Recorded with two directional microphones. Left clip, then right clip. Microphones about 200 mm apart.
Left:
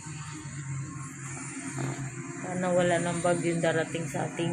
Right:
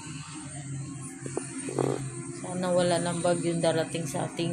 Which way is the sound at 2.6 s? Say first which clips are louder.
Even; 15° right (ahead or behind).